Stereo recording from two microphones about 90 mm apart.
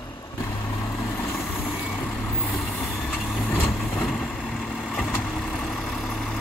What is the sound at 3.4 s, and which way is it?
Vehicle, 20° left (ahead or behind).